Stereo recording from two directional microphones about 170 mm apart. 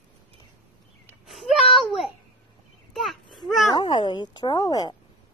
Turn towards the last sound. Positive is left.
turn(degrees=25)  # may be behind; listen again after turning